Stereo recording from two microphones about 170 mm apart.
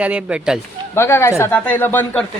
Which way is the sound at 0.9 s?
15° left (ahead or behind).